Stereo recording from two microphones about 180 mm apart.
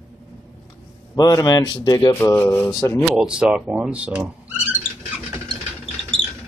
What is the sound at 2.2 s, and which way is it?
Speech, 10° left (ahead or behind).